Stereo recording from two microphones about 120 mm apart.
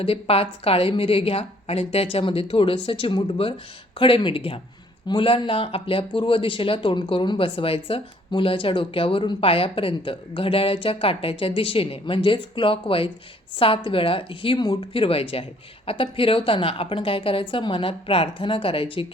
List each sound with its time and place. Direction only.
0.0 s speech: 50° left (ahead or behind)